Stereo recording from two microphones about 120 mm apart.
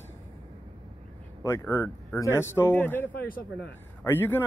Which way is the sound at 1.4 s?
25° left (ahead or behind).